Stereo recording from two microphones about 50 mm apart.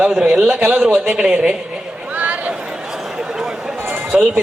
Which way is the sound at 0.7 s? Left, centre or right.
Right.